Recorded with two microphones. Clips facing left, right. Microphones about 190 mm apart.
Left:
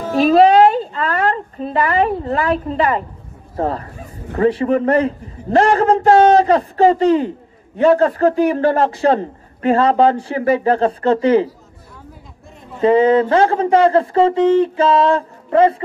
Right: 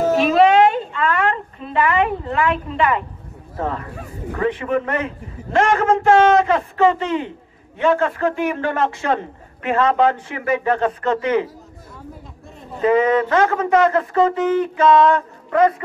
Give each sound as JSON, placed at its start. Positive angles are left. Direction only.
{"t": 0.2, "sound": "a sound", "side_deg": 35}
{"t": 3.5, "sound": "speech", "side_deg": 35}
{"t": 12.8, "sound": "speech", "side_deg": 30}